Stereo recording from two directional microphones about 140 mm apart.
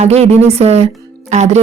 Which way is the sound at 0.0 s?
50° right (ahead or behind).